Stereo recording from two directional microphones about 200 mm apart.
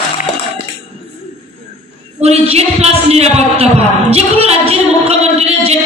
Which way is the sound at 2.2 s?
30° right (ahead or behind).